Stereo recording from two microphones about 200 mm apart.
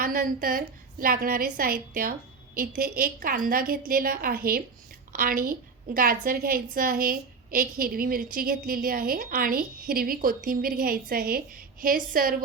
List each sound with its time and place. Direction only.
0.0 s a woman's voice: 45° right (ahead or behind)